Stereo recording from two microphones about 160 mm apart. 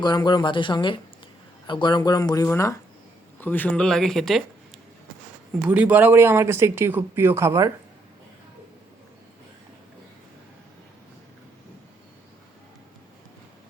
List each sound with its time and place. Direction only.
0.0 s speech: 25° left (ahead or behind); by 4.4 s centre (ahead or behind)
5.6 s speech: 10° right (ahead or behind)